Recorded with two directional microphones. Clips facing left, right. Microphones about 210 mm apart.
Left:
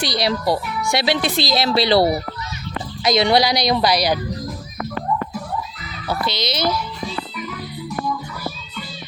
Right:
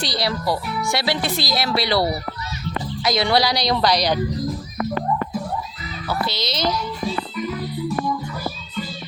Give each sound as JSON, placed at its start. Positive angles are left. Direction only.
{"t": 0.1, "sound": "a woman's voice", "side_deg": 20}
{"t": 6.1, "sound": "a woman's voice", "side_deg": 15}